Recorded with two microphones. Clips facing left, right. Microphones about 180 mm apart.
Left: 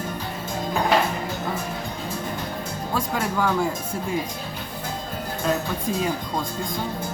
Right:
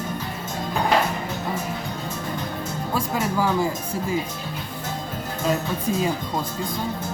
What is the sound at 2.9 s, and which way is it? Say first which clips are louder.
Music: right 1 dB; 5° right (ahead or behind).